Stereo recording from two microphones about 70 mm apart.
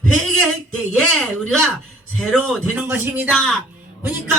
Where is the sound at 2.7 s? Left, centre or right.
Right.